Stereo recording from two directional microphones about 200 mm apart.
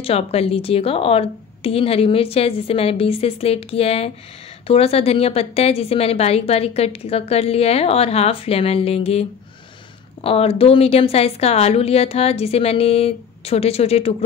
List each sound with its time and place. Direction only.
0.0 s a woman's voice: 30° left (ahead or behind)
10.2 s a woman's voice: 30° left (ahead or behind)